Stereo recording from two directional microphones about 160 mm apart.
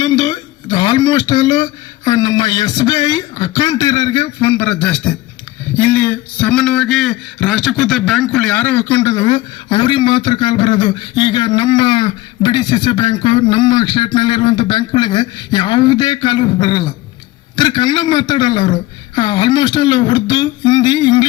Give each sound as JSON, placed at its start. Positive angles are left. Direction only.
{"t": 0.0, "sound": "speech", "side_deg": 25}